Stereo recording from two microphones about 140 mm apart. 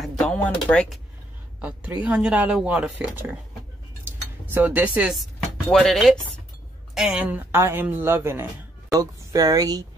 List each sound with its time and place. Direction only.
0.0 s speech: 5° left (ahead or behind)
1.6 s speech: 10° right (ahead or behind)
4.0 s cutlery: 15° right (ahead or behind); by 6.1 s centre (ahead or behind)
7.0 s speech: 5° right (ahead or behind); by 9.8 s 25° right (ahead or behind)